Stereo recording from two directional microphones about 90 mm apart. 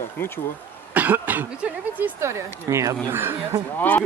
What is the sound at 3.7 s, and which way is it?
Speech, 20° left (ahead or behind).